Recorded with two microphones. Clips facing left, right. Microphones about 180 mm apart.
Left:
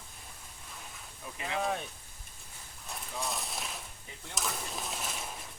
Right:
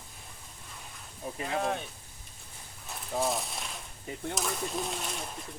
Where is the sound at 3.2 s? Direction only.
Centre (ahead or behind).